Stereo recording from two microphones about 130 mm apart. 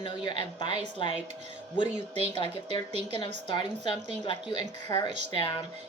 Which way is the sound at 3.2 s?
40° left (ahead or behind).